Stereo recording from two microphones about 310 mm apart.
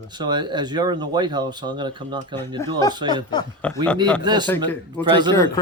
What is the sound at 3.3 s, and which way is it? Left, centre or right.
Speech, centre.